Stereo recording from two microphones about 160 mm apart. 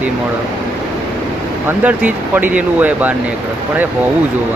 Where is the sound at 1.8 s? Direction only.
10° right (ahead or behind).